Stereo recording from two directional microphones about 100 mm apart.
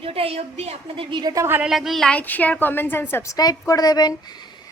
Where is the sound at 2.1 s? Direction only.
15° left (ahead or behind); by 4.5 s 45° left (ahead or behind).